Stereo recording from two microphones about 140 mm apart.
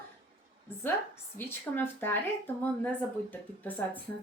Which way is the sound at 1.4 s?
15° left (ahead or behind).